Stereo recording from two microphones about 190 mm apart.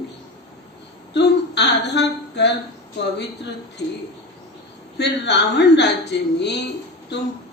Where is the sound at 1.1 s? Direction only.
60° left (ahead or behind).